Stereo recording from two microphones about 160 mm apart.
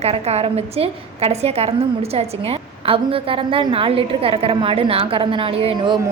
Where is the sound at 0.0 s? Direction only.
40° right (ahead or behind).